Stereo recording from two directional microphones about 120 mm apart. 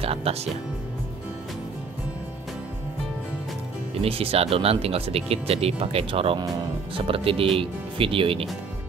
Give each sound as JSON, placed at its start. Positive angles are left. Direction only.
{"t": 0.0, "sound": "speech", "side_deg": -55}
{"t": 4.0, "sound": "speech", "side_deg": -55}